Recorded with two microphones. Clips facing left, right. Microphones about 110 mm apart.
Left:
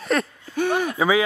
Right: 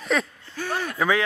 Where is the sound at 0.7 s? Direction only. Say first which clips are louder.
Left 2 dB; 15° left (ahead or behind).